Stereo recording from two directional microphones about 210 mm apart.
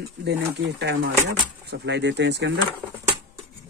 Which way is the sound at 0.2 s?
55° right (ahead or behind).